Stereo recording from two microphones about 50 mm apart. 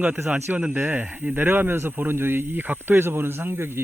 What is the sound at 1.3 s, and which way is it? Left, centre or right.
Speech, right.